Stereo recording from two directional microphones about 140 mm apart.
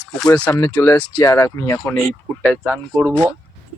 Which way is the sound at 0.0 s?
5° left (ahead or behind).